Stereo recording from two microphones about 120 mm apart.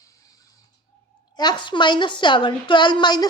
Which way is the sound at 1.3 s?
40° left (ahead or behind).